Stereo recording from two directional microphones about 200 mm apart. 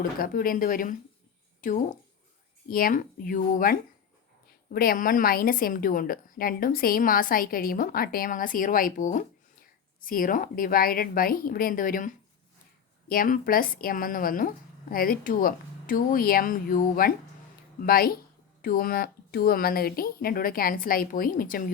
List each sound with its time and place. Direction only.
0.2 s a woman's voice: 45° left (ahead or behind)